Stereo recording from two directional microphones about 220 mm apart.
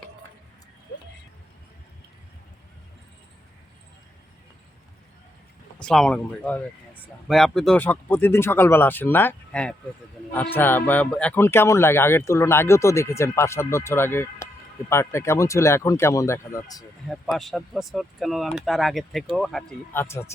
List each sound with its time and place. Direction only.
5.8 s speech: centre (ahead or behind)
17.1 s speech: centre (ahead or behind)